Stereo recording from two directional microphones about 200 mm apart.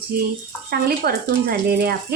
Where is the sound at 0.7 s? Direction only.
50° right (ahead or behind).